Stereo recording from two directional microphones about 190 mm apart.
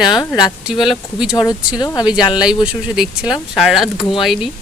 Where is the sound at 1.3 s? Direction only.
20° left (ahead or behind).